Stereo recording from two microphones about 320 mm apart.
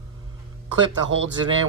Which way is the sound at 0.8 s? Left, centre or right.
Right.